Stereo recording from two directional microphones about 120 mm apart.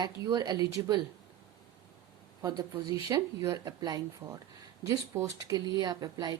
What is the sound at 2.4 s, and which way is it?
A woman's voice, 35° right (ahead or behind).